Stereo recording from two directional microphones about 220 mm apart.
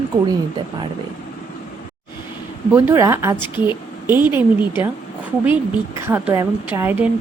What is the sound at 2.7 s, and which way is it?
A woman's voice, 10° right (ahead or behind).